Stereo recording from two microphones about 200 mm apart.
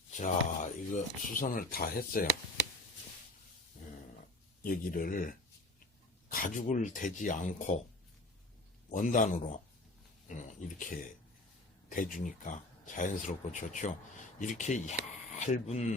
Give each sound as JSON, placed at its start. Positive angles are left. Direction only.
{"t": 0.2, "sound": "speech", "side_deg": 40}
{"t": 4.6, "sound": "speech", "side_deg": 45}
{"t": 8.9, "sound": "speech", "side_deg": 40}